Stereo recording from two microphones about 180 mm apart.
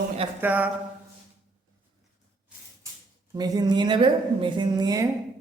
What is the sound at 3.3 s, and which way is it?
A woman's voice, 20° right (ahead or behind).